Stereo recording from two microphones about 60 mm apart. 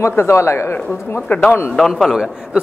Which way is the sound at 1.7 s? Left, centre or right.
Centre.